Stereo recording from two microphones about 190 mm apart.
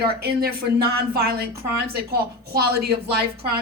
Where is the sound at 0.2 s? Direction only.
55° right (ahead or behind).